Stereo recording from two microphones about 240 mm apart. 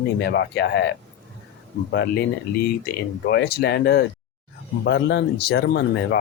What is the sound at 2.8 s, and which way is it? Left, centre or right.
Speech, left.